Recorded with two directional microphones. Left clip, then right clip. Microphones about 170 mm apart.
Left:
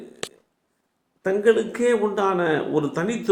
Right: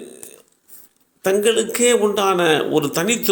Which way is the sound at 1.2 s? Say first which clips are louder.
Right 2 dB; 20° right (ahead or behind).